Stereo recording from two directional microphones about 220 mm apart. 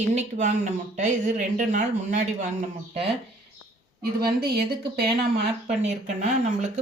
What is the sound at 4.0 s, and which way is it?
Speech, 45° right (ahead or behind).